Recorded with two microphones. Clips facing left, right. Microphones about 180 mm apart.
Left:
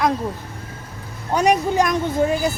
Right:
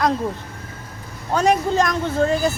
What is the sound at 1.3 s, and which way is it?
Speech, 15° left (ahead or behind).